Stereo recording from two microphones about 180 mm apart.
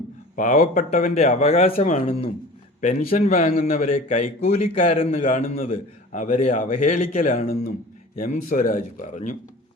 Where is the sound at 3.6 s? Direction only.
50° left (ahead or behind).